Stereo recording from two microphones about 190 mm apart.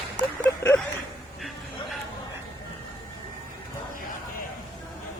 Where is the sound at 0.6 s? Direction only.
15° left (ahead or behind).